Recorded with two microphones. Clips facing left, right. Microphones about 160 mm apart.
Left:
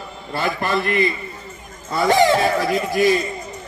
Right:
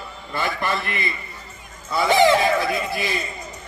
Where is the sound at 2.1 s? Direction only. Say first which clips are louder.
Left 1 dB; 40° left (ahead or behind).